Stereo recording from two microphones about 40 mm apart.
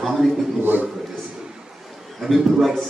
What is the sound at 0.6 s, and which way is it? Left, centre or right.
Speech, right.